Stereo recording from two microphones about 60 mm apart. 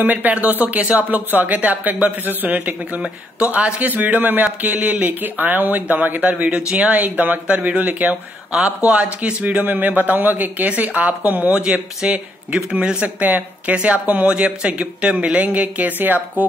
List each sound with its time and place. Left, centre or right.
0.0 s speech: right
12.0 s speech: centre; by 16.4 s right